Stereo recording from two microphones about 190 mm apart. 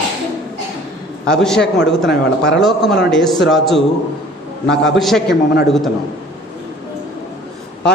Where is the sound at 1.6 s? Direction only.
65° left (ahead or behind).